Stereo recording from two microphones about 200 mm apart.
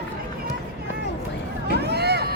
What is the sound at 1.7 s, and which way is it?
Boat, 55° right (ahead or behind).